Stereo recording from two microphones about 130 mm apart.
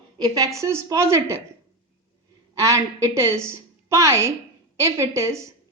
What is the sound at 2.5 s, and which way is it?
A woman's voice, 25° right (ahead or behind).